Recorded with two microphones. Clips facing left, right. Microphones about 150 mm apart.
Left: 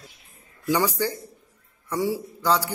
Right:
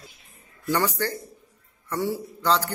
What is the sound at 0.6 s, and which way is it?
Speech, 10° left (ahead or behind).